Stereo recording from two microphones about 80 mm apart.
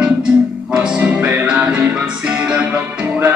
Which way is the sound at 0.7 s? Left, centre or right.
Centre.